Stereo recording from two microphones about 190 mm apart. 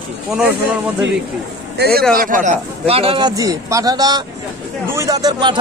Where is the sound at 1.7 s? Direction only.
55° right (ahead or behind); by 5.6 s 20° right (ahead or behind).